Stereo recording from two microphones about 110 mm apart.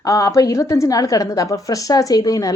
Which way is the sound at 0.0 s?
30° left (ahead or behind).